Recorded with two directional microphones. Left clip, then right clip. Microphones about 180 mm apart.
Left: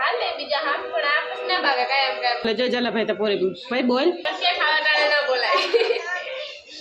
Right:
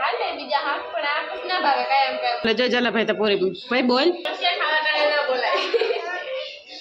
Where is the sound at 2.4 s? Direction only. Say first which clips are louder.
Right 2 dB; centre (ahead or behind).